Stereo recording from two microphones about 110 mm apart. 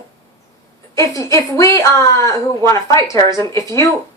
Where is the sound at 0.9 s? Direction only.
30° left (ahead or behind).